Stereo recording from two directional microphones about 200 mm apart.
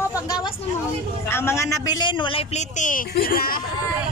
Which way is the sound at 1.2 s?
10° left (ahead or behind).